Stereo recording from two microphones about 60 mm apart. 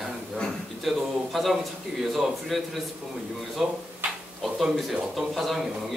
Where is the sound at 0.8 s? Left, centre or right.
Centre.